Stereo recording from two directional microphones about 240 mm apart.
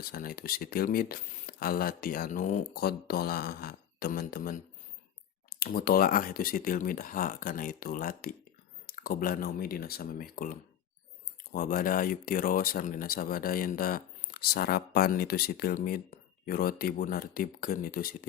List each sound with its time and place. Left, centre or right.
0.0 s speech: left